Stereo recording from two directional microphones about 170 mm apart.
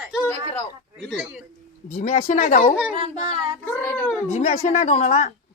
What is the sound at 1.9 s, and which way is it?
Speech, 45° left (ahead or behind).